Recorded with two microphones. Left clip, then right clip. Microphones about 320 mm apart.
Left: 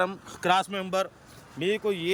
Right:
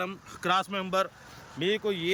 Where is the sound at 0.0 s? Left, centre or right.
Centre.